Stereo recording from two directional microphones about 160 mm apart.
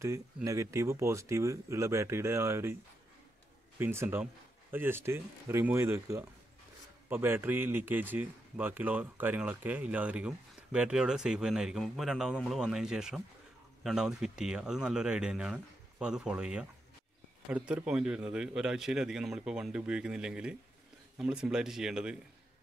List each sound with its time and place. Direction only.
0.0 s a man's voice: 20° right (ahead or behind)
3.7 s a man's voice: 15° right (ahead or behind)